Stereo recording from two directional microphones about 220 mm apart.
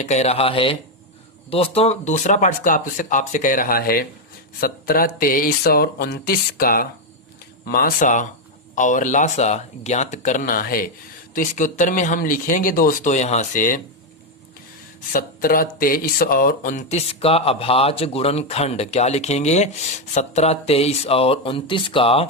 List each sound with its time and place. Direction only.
0.0 s speech: 30° left (ahead or behind)
15.1 s speech: 40° left (ahead or behind); by 22.3 s 25° left (ahead or behind)